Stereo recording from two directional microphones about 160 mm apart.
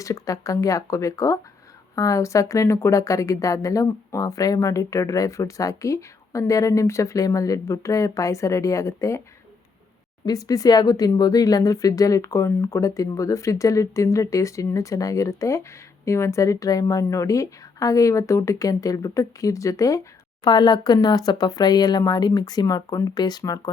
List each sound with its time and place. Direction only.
0.0 s a woman's voice: 20° left (ahead or behind)
10.2 s a woman's voice: 20° left (ahead or behind)